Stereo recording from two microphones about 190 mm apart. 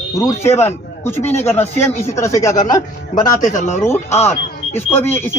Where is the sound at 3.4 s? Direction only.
40° left (ahead or behind).